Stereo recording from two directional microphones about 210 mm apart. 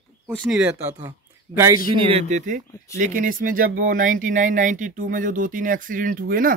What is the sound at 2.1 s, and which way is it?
Speech, 30° right (ahead or behind).